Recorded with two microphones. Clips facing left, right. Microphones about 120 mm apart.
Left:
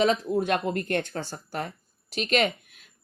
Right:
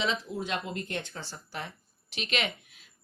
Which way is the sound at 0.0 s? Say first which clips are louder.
Left 9 dB; 50° left (ahead or behind).